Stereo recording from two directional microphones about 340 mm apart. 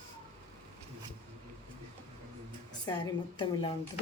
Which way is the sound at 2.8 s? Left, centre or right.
Centre.